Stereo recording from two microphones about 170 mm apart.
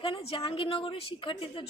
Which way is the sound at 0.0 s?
35° left (ahead or behind).